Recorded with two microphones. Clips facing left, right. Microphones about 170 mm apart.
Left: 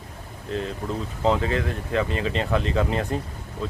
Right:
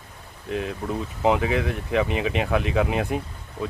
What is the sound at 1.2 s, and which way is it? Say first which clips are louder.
Speech: right 1 dB; 15° right (ahead or behind).